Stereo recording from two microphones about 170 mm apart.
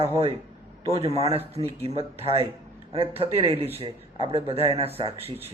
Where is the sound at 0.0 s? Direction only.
35° right (ahead or behind).